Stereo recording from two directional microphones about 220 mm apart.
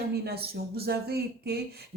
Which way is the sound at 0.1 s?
45° right (ahead or behind).